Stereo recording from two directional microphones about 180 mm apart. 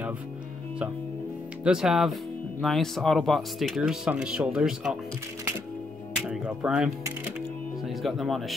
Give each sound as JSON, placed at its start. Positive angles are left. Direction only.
{"t": 1.6, "sound": "speech", "side_deg": -5}
{"t": 6.2, "sound": "speech", "side_deg": -5}